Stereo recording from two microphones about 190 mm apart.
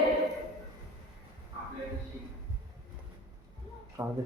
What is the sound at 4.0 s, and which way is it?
Speech, 15° right (ahead or behind).